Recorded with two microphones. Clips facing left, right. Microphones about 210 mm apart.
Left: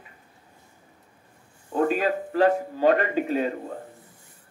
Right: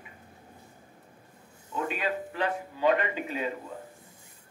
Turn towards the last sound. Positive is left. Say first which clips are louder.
# left 7 dB
turn(degrees=45)  # may be behind; listen again after turning